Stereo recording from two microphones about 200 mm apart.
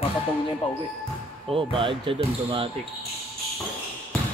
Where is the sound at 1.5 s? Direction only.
25° right (ahead or behind).